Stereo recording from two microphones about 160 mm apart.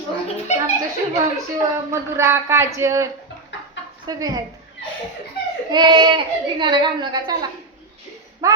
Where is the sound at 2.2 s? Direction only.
15° right (ahead or behind).